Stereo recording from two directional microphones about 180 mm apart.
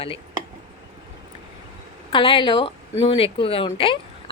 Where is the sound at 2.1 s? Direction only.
30° left (ahead or behind).